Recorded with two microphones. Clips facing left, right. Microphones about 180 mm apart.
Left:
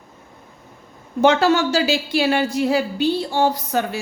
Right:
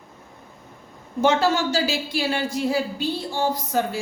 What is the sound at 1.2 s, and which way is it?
A woman's voice, 70° left (ahead or behind).